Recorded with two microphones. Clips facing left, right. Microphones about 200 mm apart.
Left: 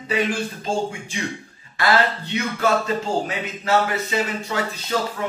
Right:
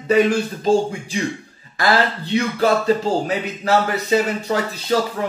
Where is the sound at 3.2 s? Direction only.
40° right (ahead or behind).